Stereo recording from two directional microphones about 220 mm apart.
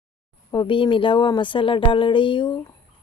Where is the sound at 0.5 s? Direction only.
20° left (ahead or behind).